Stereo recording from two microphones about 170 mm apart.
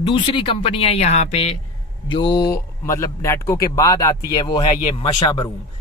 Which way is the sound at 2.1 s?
25° left (ahead or behind).